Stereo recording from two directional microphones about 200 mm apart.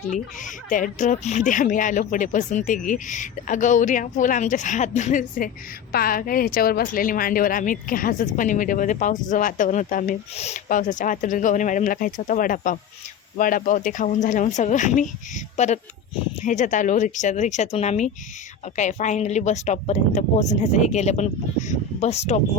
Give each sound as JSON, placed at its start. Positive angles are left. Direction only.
{"t": 0.1, "sound": "a woman's voice", "side_deg": 40}